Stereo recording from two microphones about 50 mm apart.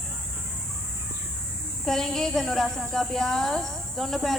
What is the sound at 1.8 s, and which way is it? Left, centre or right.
A woman's voice, centre.